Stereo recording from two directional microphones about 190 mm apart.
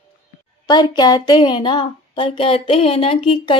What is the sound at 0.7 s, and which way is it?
Speech, 20° left (ahead or behind).